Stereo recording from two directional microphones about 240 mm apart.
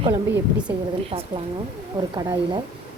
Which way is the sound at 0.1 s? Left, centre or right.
Centre.